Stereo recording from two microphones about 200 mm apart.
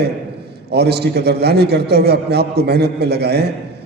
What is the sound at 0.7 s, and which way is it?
A man's voice, 55° right (ahead or behind).